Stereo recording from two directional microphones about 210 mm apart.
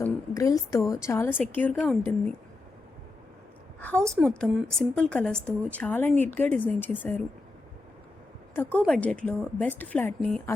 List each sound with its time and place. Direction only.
0.0 s a sound: 15° left (ahead or behind)
1.0 s a woman's voice: 10° left (ahead or behind)
3.8 s a woman's voice: 5° left (ahead or behind)
8.8 s a woman's voice: 5° left (ahead or behind)